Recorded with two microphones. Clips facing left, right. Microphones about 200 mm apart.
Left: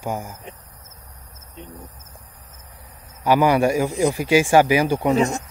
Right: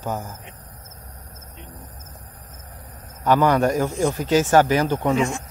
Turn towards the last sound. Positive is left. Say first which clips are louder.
# left 3 dB
turn(degrees=40)  # may be behind; listen again after turning